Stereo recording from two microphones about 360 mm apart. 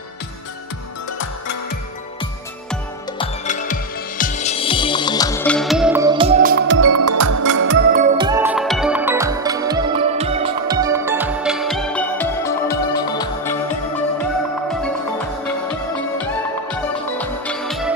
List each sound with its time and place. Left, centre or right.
3.2 s music: left; by 6.8 s right
6.8 s music: right
7.7 s music: right; by 13.6 s centre
14.7 s music: centre
17.2 s music: centre